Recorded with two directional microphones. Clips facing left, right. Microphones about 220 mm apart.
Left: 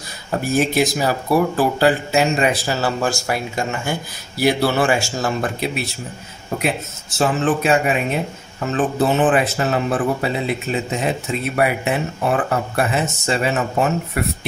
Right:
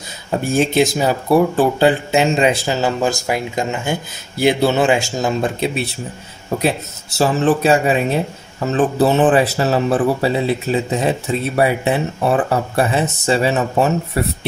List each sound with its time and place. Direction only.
0.3 s speech: 25° right (ahead or behind)
7.2 s speech: 35° right (ahead or behind)